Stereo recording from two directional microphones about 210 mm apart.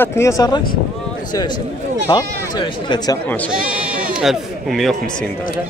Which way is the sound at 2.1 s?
20° left (ahead or behind).